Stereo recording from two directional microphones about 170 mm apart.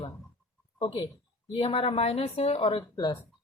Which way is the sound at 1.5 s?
30° left (ahead or behind).